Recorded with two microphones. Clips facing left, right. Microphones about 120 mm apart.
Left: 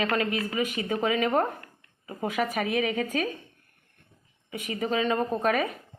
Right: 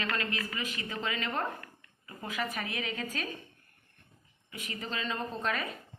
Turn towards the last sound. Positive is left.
turn(degrees=60)  # may be behind; listen again after turning